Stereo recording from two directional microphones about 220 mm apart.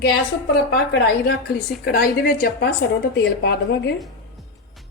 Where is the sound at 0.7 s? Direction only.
50° left (ahead or behind).